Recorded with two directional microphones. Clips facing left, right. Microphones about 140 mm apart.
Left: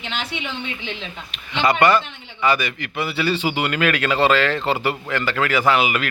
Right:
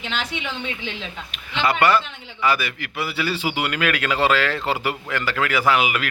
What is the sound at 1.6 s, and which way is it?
Speech, 5° right (ahead or behind).